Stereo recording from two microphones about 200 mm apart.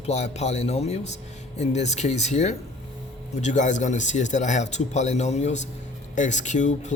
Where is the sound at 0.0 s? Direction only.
35° left (ahead or behind).